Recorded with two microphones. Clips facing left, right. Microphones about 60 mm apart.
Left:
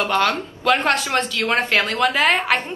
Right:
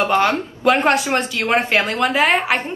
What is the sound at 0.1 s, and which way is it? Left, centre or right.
A woman's voice, centre.